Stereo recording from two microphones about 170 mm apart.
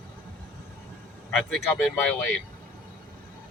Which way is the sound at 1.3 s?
5° left (ahead or behind).